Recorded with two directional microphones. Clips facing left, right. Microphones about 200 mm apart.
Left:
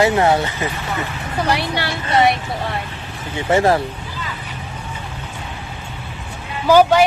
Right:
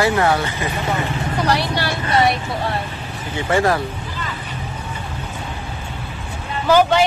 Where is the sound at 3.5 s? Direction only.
25° left (ahead or behind).